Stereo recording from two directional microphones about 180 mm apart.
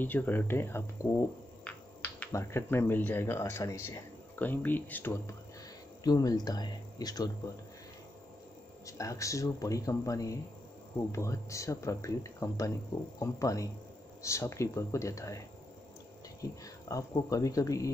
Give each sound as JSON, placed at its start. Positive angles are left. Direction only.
{"t": 0.0, "sound": "speech", "side_deg": 10}
{"t": 8.8, "sound": "speech", "side_deg": 15}